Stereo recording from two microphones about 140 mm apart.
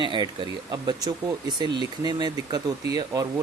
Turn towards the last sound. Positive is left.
turn(degrees=-25)  # may be behind; listen again after turning